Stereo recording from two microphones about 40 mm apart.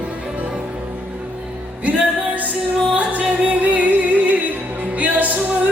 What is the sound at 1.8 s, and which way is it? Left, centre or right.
Music, right.